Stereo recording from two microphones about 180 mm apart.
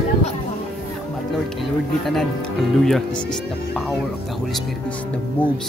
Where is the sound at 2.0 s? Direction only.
Centre (ahead or behind).